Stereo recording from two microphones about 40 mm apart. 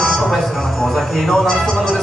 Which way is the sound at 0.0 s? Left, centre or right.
Centre.